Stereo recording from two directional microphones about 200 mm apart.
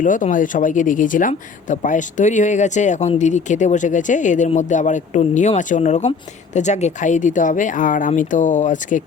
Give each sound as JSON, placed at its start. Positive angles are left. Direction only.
{"t": 0.0, "sound": "speech", "side_deg": 40}